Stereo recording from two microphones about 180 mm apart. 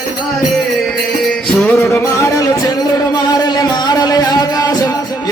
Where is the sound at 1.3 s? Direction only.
10° left (ahead or behind).